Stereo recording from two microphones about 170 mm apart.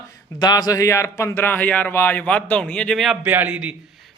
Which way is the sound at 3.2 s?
10° right (ahead or behind).